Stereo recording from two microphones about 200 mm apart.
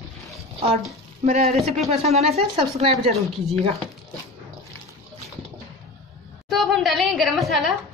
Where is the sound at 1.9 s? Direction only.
30° right (ahead or behind).